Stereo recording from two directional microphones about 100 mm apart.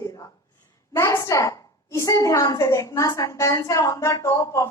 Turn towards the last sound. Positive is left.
turn(degrees=35)  # may be behind; listen again after turning